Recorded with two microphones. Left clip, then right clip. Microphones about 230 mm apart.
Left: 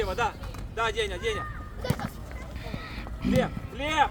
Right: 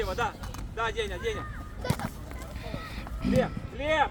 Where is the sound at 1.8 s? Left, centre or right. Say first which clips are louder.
Left 1 dB; left.